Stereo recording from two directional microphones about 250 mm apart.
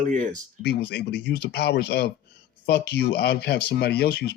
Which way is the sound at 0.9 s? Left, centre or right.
Left.